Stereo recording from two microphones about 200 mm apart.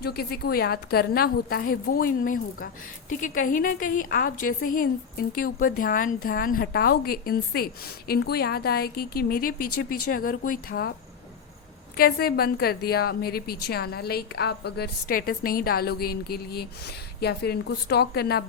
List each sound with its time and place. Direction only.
0.0 s a woman's voice: 50° left (ahead or behind)
11.9 s a woman's voice: 50° left (ahead or behind)